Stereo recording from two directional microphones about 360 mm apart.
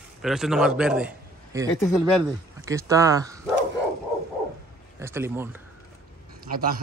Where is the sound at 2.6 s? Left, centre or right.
Centre.